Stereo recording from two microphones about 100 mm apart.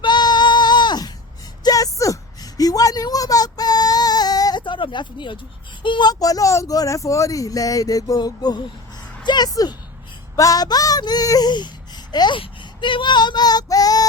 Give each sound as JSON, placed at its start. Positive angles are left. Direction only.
{"t": 0.0, "sound": "female singing", "side_deg": 45}
{"t": 1.6, "sound": "a sound", "side_deg": 35}
{"t": 5.8, "sound": "speech", "side_deg": 50}
{"t": 9.2, "sound": "a sound", "side_deg": 45}
{"t": 10.3, "sound": "speech", "side_deg": 35}
{"t": 12.4, "sound": "child singing", "side_deg": 55}